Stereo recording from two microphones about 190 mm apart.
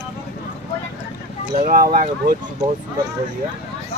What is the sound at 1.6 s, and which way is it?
Speech, 45° right (ahead or behind).